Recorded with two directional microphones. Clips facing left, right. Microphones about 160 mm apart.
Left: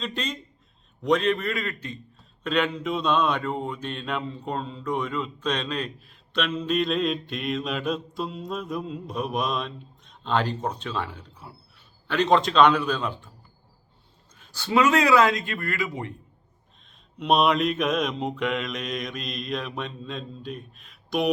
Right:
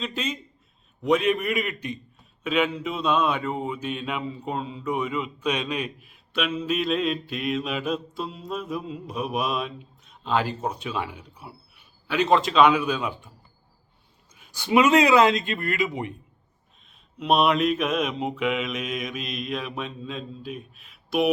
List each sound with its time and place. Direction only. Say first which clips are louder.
0.0 s mantra: right 1 dB; 5° right (ahead or behind)
14.3 s a man's voice: right 2 dB; 15° right (ahead or behind)
17.2 s mantra: even; centre (ahead or behind)